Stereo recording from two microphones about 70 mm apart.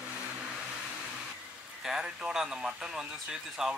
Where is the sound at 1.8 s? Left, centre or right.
Centre.